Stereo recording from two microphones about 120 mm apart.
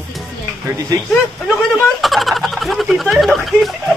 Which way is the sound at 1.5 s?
Centre (ahead or behind).